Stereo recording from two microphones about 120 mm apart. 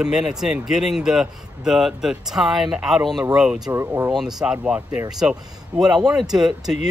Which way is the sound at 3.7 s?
20° right (ahead or behind).